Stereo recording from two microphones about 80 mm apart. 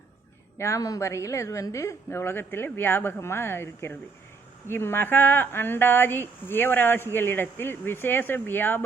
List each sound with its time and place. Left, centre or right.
0.6 s a woman's voice: left
2.0 s speech: left